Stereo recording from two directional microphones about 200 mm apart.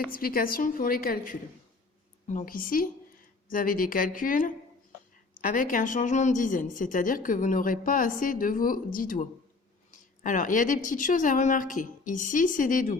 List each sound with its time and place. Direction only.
0.1 s a woman's voice: 45° left (ahead or behind)
9.9 s a sound: 40° left (ahead or behind)
10.8 s a woman's voice: 40° left (ahead or behind)